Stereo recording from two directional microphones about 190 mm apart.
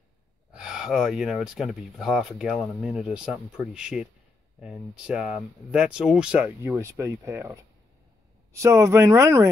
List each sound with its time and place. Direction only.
0.5 s speech: 5° right (ahead or behind)
8.5 s speech: 15° right (ahead or behind)